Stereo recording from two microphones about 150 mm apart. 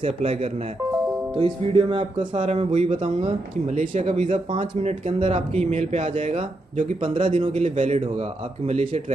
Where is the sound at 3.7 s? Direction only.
50° right (ahead or behind).